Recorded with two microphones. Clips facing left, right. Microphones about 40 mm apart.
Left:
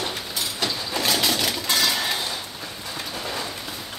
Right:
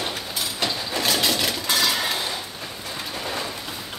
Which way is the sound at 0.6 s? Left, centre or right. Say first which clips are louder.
Right 1 dB; centre.